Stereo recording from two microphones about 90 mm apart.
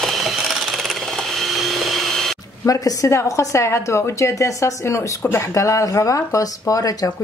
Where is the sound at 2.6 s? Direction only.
40° left (ahead or behind).